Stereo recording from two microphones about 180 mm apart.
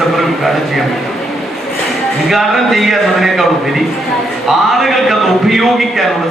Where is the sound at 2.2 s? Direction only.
Centre (ahead or behind).